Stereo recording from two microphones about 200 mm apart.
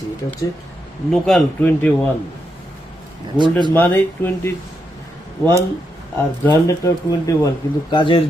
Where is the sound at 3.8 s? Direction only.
10° left (ahead or behind).